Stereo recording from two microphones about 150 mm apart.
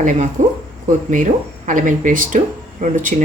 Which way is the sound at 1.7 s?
60° right (ahead or behind).